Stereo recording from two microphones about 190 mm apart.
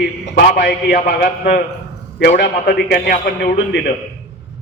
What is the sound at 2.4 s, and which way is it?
Speech, 55° left (ahead or behind).